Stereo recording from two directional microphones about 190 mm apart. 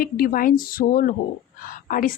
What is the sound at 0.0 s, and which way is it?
Speech, 45° left (ahead or behind).